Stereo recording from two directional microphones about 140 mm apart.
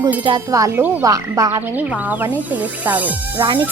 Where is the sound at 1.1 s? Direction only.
25° right (ahead or behind).